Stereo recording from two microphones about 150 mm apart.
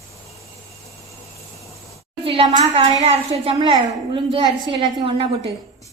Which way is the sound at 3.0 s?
45° right (ahead or behind).